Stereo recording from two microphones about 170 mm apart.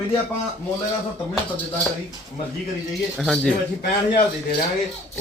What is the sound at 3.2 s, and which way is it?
Speech, centre (ahead or behind).